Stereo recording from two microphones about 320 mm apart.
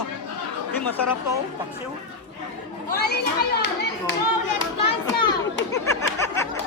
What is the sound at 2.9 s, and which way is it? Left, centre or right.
A child's voice, left.